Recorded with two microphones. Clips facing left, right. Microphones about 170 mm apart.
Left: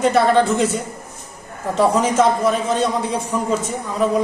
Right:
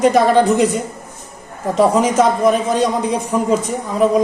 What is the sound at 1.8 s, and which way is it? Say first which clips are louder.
A man's voice: right 2 dB; 10° right (ahead or behind).